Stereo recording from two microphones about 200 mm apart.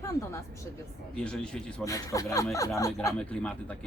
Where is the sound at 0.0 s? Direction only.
15° left (ahead or behind).